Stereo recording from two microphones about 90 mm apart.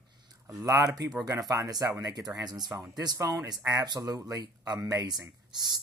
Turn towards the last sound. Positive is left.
turn(degrees=-45)  # may be behind; listen again after turning